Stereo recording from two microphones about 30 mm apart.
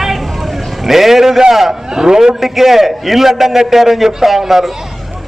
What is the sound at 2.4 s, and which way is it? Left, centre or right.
A man's voice, centre.